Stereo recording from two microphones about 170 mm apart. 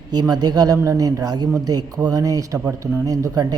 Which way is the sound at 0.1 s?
25° right (ahead or behind).